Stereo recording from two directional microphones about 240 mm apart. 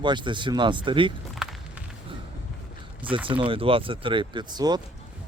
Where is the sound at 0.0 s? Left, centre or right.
Centre.